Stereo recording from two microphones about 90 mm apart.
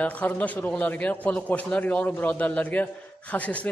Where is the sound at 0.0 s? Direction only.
15° left (ahead or behind).